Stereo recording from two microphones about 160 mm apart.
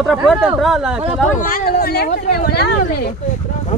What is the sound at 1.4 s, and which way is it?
Speech, 60° left (ahead or behind).